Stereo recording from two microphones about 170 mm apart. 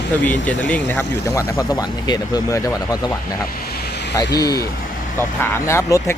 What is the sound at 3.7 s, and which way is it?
Vehicle, 65° left (ahead or behind).